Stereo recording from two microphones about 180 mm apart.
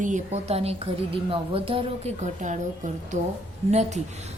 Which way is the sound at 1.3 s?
30° right (ahead or behind).